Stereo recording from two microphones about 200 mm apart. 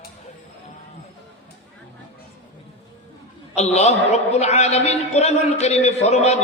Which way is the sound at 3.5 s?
35° left (ahead or behind).